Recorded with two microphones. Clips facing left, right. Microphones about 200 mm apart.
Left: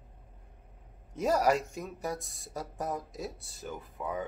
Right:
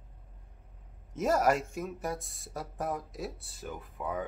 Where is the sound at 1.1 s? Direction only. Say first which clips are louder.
Even; centre (ahead or behind).